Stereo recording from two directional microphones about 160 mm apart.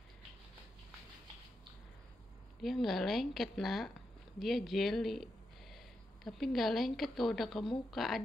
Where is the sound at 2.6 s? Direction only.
Centre (ahead or behind).